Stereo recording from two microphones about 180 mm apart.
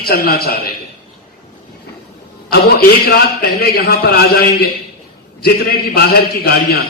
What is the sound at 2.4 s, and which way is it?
A man's voice, 60° left (ahead or behind).